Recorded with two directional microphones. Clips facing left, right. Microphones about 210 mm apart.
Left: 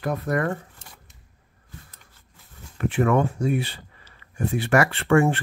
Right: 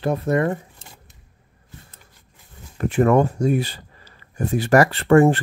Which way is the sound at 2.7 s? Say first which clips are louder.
Right 4 dB; 40° right (ahead or behind).